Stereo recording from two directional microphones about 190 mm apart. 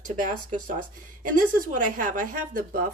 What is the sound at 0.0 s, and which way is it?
Speech, 40° right (ahead or behind).